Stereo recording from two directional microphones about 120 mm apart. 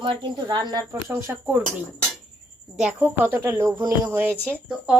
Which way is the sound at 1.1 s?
20° right (ahead or behind).